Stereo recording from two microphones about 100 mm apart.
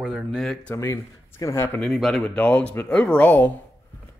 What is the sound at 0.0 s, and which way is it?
Speech, 10° right (ahead or behind).